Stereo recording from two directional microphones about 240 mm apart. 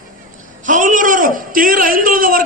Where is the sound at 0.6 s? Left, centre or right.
Right.